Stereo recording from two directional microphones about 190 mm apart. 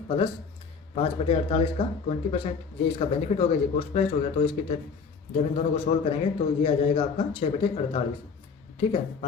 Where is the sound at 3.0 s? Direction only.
30° left (ahead or behind).